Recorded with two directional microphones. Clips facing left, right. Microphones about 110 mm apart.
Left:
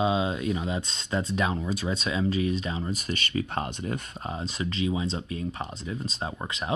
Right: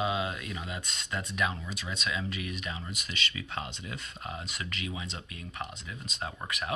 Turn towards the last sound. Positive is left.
turn(degrees=25)  # may be behind; listen again after turning